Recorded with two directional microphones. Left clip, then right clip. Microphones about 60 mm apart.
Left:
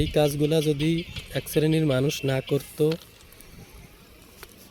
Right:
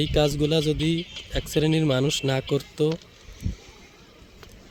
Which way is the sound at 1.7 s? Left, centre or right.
Right.